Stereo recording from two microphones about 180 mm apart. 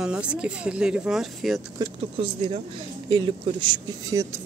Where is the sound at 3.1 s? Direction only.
25° right (ahead or behind).